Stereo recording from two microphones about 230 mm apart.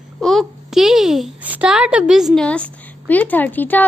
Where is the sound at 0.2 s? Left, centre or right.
Centre.